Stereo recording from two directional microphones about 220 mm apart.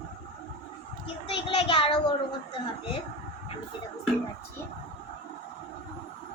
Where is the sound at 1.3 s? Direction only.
25° left (ahead or behind).